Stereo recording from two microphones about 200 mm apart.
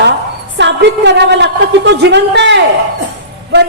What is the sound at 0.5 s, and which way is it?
A woman's voice, 60° right (ahead or behind).